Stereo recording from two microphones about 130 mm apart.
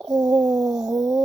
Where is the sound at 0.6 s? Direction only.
5° right (ahead or behind).